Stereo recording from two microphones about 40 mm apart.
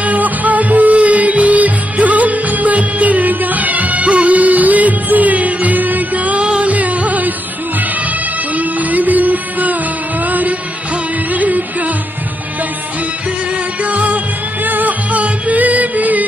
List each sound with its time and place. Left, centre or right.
0.0 s music: right
8.5 s music: right
13.8 s music: right